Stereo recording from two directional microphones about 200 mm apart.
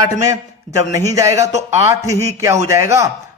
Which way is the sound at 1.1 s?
15° right (ahead or behind).